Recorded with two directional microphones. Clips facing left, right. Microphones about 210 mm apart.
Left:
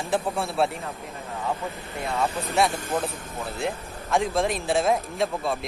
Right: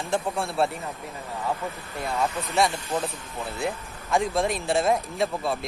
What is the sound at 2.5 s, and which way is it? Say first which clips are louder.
Speech: left 1 dB; 5° left (ahead or behind).